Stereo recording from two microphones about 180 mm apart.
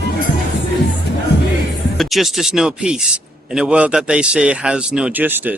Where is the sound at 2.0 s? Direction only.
Centre (ahead or behind).